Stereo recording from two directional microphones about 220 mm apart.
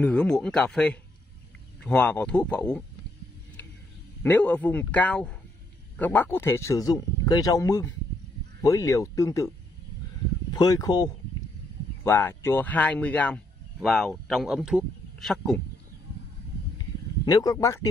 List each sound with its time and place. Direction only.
0.0 s speech: 5° left (ahead or behind)
4.2 s speech: 5° left (ahead or behind)
10.5 s a man's voice: 20° left (ahead or behind); by 15.6 s centre (ahead or behind)
17.2 s speech: 15° left (ahead or behind)